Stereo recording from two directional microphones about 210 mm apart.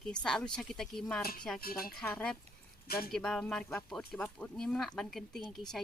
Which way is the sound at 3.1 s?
5° left (ahead or behind).